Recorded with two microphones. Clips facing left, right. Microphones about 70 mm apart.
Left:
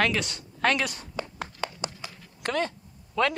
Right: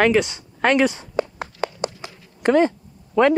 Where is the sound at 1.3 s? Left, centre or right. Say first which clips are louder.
Right 7 dB; right.